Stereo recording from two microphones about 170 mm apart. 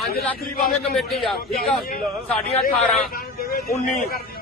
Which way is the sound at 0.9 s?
Centre (ahead or behind).